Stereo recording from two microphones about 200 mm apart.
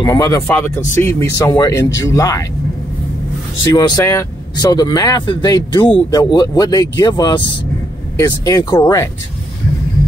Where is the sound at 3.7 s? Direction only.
20° left (ahead or behind).